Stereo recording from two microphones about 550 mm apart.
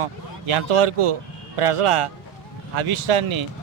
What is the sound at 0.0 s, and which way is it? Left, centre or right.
Speech, right.